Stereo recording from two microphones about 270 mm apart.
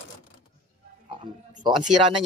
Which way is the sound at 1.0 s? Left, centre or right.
Right.